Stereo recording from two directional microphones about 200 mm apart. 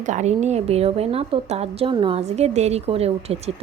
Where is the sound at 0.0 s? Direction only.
35° right (ahead or behind).